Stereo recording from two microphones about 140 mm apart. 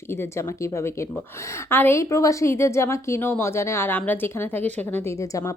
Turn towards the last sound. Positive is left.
turn(degrees=20)  # may be behind; listen again after turning